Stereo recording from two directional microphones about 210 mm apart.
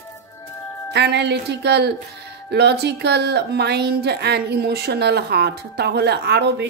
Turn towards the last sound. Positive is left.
turn(degrees=-55)  # may be behind; listen again after turning